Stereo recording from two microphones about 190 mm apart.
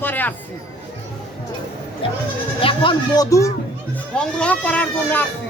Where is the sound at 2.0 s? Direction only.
30° left (ahead or behind).